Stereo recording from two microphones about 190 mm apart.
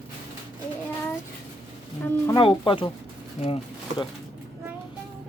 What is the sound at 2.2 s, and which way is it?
Speech, 25° left (ahead or behind).